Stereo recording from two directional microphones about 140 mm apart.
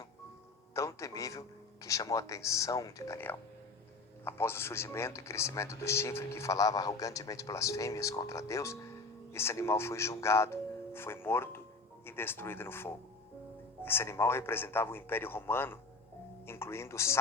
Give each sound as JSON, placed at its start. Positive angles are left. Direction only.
{"t": 0.7, "sound": "speech", "side_deg": 20}